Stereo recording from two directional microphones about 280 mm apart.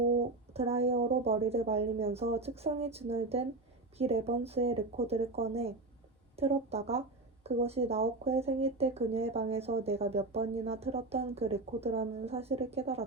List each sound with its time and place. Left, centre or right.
0.2 s speech: right